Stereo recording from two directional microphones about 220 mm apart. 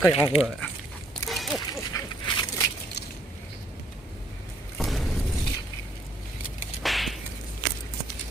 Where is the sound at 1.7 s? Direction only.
20° left (ahead or behind).